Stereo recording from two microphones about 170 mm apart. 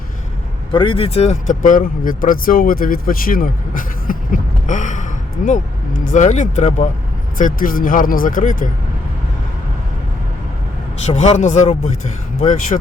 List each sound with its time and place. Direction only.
0.7 s speech: 30° left (ahead or behind)
7.3 s speech: 55° left (ahead or behind)
11.0 s speech: 45° left (ahead or behind)